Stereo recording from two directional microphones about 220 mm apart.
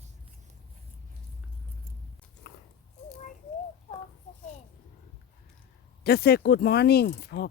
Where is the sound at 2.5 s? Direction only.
50° left (ahead or behind).